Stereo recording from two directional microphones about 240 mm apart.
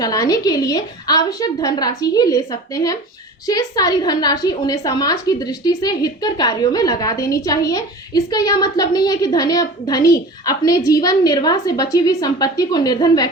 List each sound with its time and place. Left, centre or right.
0.0 s a woman's voice: centre